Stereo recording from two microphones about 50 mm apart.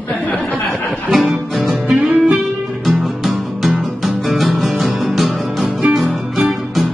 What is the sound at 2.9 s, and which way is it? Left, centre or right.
Music, centre.